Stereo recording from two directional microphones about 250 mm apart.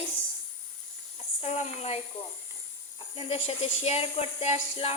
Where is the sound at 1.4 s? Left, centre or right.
Left.